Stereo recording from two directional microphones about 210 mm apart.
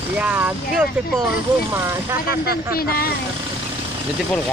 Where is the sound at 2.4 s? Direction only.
45° left (ahead or behind).